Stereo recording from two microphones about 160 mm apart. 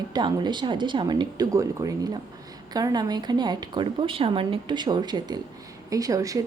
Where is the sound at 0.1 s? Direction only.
25° right (ahead or behind).